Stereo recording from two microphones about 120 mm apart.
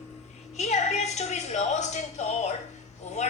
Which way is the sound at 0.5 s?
65° left (ahead or behind).